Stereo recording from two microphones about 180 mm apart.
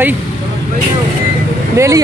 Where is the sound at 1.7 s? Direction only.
15° right (ahead or behind).